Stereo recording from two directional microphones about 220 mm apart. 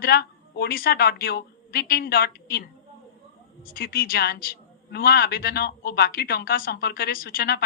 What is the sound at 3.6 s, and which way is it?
A woman's voice, 45° left (ahead or behind).